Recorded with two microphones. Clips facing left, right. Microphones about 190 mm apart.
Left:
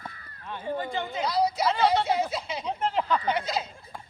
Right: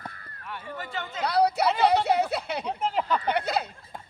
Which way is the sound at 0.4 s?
25° left (ahead or behind).